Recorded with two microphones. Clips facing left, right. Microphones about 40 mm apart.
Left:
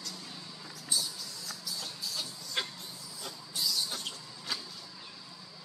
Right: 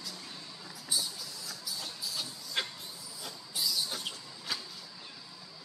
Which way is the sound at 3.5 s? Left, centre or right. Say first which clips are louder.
Even; centre.